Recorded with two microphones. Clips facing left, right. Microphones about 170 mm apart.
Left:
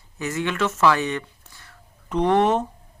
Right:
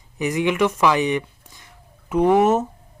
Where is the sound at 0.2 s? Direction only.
15° right (ahead or behind).